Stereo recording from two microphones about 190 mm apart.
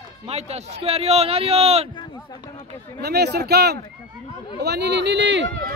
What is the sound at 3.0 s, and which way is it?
Speech, 60° right (ahead or behind).